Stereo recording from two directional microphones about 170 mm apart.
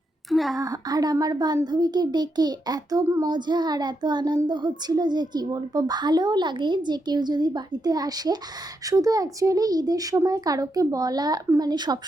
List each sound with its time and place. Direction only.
0.3 s a woman's voice: centre (ahead or behind)
0.6 s a child's voice: 20° right (ahead or behind)